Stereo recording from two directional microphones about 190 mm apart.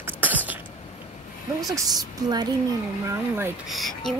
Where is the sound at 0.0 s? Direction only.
10° right (ahead or behind).